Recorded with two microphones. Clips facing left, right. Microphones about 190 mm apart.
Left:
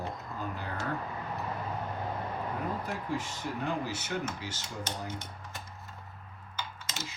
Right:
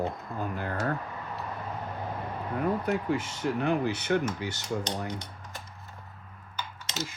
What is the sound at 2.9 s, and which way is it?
Speech, 65° right (ahead or behind).